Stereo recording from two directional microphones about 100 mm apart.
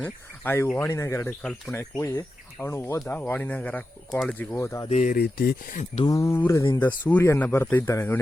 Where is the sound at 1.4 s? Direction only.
10° left (ahead or behind).